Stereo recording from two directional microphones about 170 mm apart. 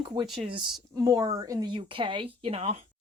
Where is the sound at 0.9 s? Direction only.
20° right (ahead or behind).